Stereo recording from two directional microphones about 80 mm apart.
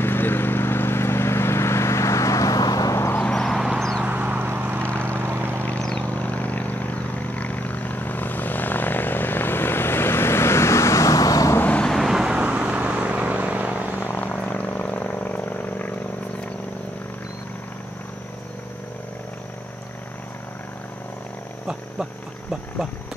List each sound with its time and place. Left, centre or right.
0.0 s vehicle: left
3.2 s a sound: centre
4.0 s vehicle: right
5.7 s vehicle: centre; by 11.5 s left
11.6 s vehicle: centre
11.9 s vehicle: centre
13.9 s frog: left